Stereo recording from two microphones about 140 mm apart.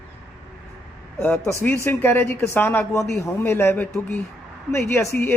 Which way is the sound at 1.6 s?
15° left (ahead or behind).